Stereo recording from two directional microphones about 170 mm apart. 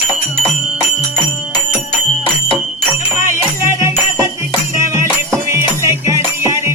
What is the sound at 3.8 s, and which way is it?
Music, 15° right (ahead or behind).